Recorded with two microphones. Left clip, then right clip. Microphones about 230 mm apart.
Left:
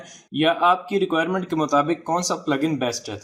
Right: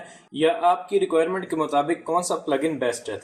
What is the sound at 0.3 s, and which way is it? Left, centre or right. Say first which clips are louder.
Speech: left 2 dB; left.